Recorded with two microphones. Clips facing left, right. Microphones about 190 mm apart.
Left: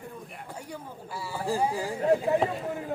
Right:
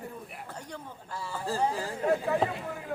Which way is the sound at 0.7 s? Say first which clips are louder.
Left 2 dB; 10° left (ahead or behind).